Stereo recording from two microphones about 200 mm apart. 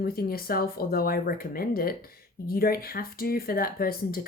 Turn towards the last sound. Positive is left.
turn(degrees=45)  # may be behind; listen again after turning